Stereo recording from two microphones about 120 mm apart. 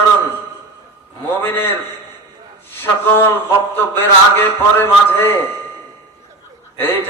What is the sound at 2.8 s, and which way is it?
Speech, 15° left (ahead or behind).